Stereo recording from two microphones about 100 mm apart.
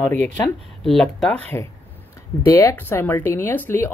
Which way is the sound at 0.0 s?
20° left (ahead or behind).